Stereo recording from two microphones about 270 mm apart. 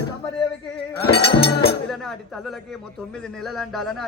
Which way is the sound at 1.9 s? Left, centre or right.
Centre.